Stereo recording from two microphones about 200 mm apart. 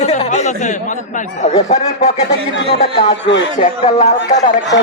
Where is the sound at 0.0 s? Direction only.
35° left (ahead or behind).